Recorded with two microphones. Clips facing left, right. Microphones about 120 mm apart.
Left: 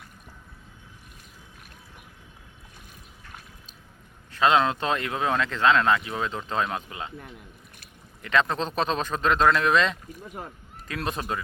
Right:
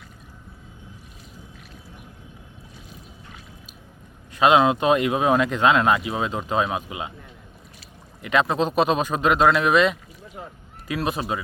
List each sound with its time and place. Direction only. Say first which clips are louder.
4.3 s speech: right 4 dB; 15° right (ahead or behind)
8.2 s speech: right 4 dB; 10° right (ahead or behind)
10.2 s rowboat: left 1 dB; 50° left (ahead or behind)
10.8 s speech: right 5 dB; 5° right (ahead or behind)